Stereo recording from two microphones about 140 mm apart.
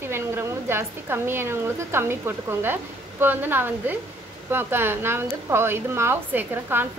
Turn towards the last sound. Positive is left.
turn(degrees=-15)  # may be behind; listen again after turning